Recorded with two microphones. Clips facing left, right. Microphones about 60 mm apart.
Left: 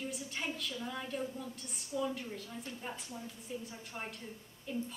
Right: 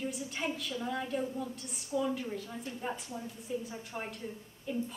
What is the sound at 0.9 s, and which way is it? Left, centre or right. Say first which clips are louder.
A woman's voice: right 7 dB; centre.